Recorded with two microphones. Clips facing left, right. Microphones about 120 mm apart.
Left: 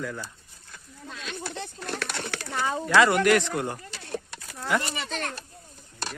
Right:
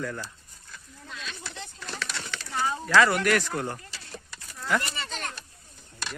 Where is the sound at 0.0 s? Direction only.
5° left (ahead or behind).